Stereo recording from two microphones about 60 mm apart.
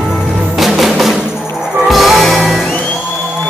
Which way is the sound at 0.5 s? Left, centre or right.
Centre.